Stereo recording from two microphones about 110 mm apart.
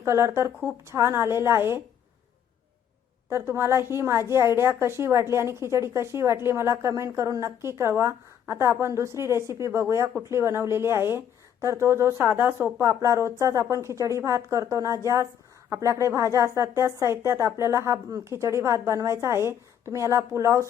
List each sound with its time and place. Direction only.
0.0 s speech: 25° right (ahead or behind)
3.2 s speech: 25° right (ahead or behind)